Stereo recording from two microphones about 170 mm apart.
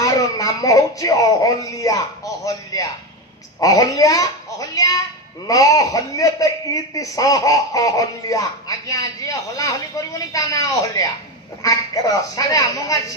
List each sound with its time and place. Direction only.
0.0 s a man's voice: 20° left (ahead or behind)